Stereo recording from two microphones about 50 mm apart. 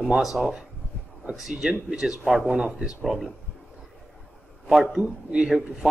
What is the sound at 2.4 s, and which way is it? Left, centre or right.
Speech, centre.